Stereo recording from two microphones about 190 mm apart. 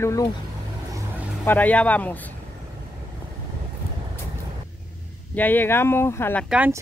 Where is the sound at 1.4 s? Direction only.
10° left (ahead or behind).